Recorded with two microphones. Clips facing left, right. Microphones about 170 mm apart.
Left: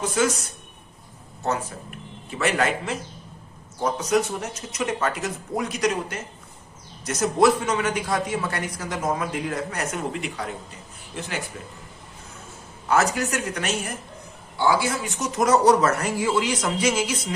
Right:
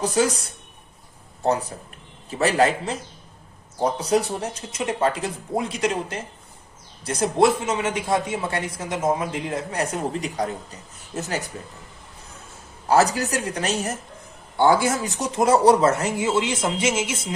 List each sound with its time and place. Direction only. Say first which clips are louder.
0.0 s speech: right 2 dB; 35° right (ahead or behind)
12.9 s speech: right 3 dB; 35° right (ahead or behind)
14.5 s speech: right 4 dB; 55° right (ahead or behind); by 17.3 s 25° right (ahead or behind)